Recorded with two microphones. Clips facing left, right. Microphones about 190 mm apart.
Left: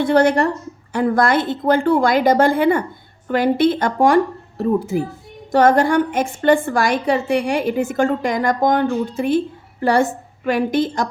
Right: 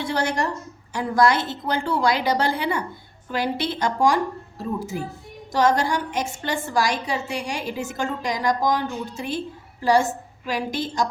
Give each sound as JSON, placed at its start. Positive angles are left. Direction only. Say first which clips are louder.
{"t": 0.0, "sound": "a woman's voice", "louder": "left 10 dB", "side_deg": 55}